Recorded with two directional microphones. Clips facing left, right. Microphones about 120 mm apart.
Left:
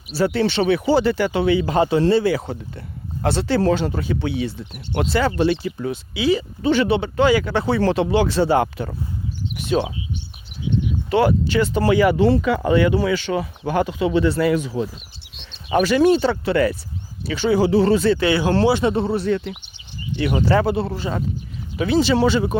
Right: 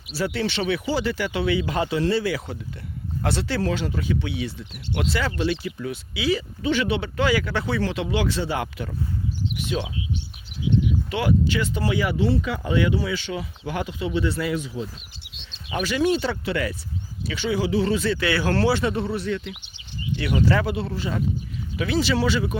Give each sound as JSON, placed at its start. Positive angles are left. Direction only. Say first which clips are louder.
{"t": 0.2, "sound": "speech", "louder": "left 7 dB", "side_deg": 30}
{"t": 11.1, "sound": "speech", "louder": "left 7 dB", "side_deg": 40}
{"t": 14.0, "sound": "speech", "louder": "left 5 dB", "side_deg": 70}
{"t": 14.3, "sound": "speech", "louder": "left 7 dB", "side_deg": 50}